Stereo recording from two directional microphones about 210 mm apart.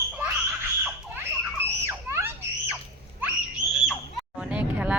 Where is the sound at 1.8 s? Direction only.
10° right (ahead or behind).